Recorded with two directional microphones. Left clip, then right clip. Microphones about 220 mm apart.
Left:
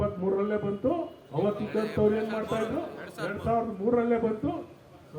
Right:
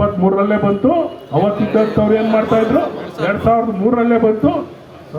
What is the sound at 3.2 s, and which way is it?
A man's voice, 45° right (ahead or behind).